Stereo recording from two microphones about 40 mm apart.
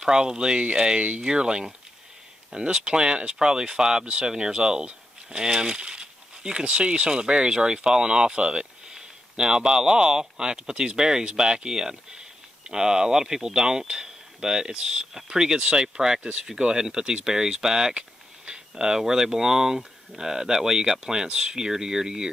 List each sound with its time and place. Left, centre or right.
0.0 s speech: centre